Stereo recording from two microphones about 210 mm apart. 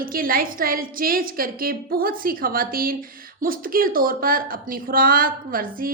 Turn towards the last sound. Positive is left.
turn(degrees=-45)  # may be behind; listen again after turning